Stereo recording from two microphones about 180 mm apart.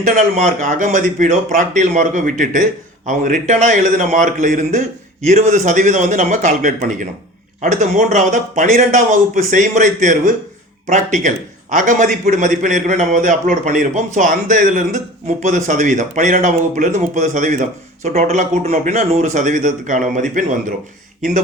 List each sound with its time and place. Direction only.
0.0 s a man's voice: 45° right (ahead or behind)